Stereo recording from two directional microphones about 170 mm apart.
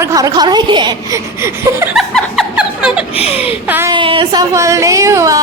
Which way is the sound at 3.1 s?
35° left (ahead or behind).